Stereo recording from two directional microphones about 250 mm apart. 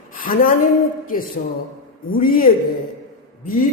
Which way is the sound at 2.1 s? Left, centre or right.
Left.